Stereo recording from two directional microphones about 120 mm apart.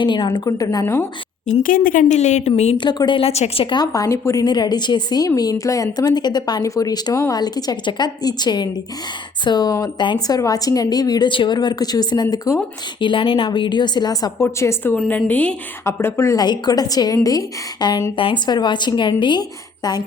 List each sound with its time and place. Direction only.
0.0 s speech: 40° left (ahead or behind)
1.5 s a woman's voice: 75° left (ahead or behind)
2.7 s speech: 40° left (ahead or behind); by 4.4 s 25° left (ahead or behind)
4.4 s speech: 35° left (ahead or behind)
14.9 s a woman's voice: 5° left (ahead or behind)
15.8 s a woman's voice: 20° left (ahead or behind)
16.4 s speech: 35° left (ahead or behind)